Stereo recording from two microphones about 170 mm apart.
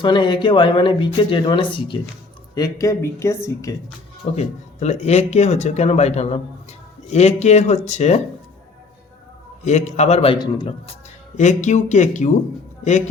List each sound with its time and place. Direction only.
0.0 s speech: 25° left (ahead or behind)
4.4 s speech: 40° left (ahead or behind)
9.6 s speech: 45° left (ahead or behind)
10.3 s speech: 25° left (ahead or behind)
11.3 s speech: 45° left (ahead or behind)